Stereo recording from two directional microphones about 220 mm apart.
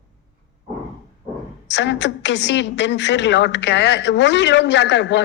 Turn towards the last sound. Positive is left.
turn(degrees=55)  # may be behind; listen again after turning